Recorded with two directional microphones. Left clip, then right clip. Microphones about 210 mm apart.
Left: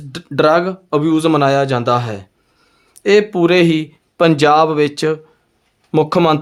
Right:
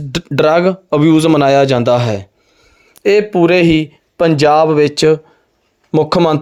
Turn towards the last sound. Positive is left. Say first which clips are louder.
# right 1 dB
turn(degrees=-20)  # may be behind; listen again after turning